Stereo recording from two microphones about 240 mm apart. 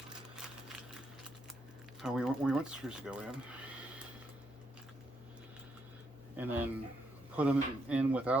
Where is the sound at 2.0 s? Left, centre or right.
Centre.